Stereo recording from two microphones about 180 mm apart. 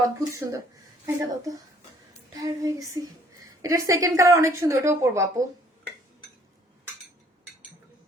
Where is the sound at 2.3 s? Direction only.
20° right (ahead or behind).